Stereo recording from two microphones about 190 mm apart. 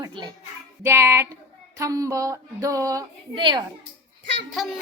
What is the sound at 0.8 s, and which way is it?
A woman's voice, 15° right (ahead or behind).